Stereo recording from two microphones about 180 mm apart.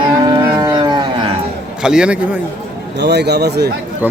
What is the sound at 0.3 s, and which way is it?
Livestock, 25° right (ahead or behind).